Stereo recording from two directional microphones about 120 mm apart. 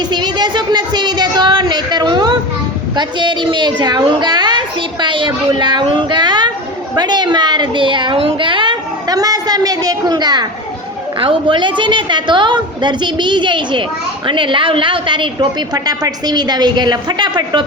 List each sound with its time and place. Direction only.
0.1 s a sound: 35° right (ahead or behind)
2.9 s a woman's voice: 40° right (ahead or behind)
11.2 s a woman's voice: 45° right (ahead or behind)